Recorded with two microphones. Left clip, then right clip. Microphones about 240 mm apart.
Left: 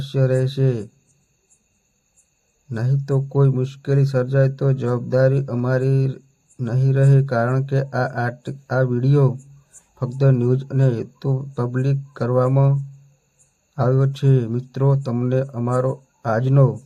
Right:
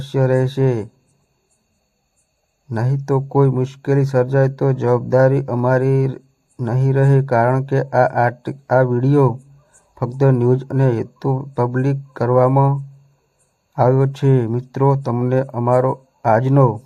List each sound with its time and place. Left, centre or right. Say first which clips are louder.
0.0 s speech: right 4 dB; right
2.6 s speech: right 4 dB; right